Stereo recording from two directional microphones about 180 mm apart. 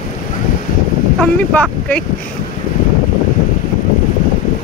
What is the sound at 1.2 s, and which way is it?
Speech, 5° left (ahead or behind).